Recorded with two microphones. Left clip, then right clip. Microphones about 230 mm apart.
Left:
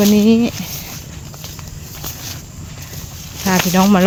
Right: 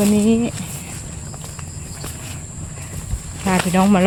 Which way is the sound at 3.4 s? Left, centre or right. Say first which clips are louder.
Left 3 dB; centre.